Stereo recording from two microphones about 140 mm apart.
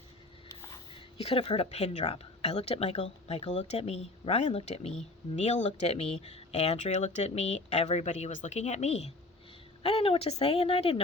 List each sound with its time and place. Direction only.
0.9 s speech: 40° left (ahead or behind)